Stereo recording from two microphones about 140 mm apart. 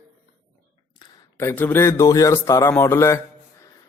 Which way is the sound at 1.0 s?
30° left (ahead or behind).